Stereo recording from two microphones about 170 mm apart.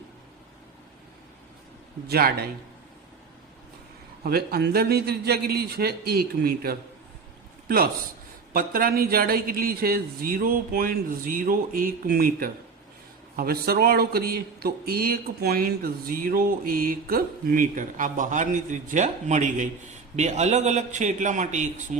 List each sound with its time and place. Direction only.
2.0 s speech: 65° right (ahead or behind)
4.2 s speech: 65° right (ahead or behind)
8.5 s a man's voice: 60° right (ahead or behind)